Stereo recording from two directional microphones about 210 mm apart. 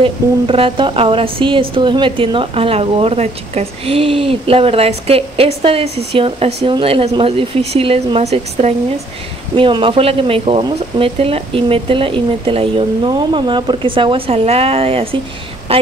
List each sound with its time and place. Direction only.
0.0 s a woman's voice: 25° right (ahead or behind)